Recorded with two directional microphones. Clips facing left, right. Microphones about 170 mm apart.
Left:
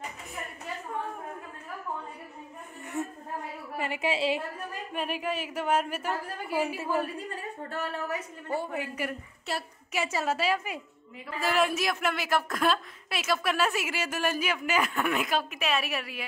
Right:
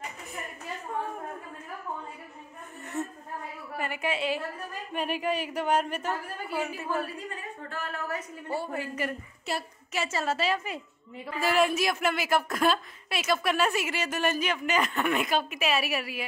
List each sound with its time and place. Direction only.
2.9 s a sound: 15° left (ahead or behind)
3.7 s a woman's voice: 25° left (ahead or behind)
4.9 s a woman's voice: centre (ahead or behind)
8.1 s a woman's voice: 15° left (ahead or behind); by 16.3 s 5° right (ahead or behind)